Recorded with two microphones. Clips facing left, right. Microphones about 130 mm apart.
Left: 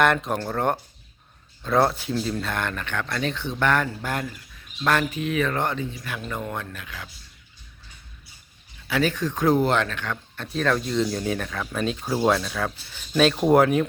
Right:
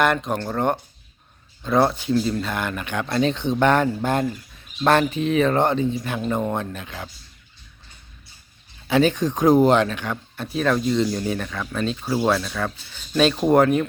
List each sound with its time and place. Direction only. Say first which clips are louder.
0.0 s speech: right 1 dB; centre (ahead or behind)
3.1 s speech: right 11 dB; 25° right (ahead or behind)
8.9 s speech: right 5 dB; 25° right (ahead or behind); by 13.8 s 5° left (ahead or behind)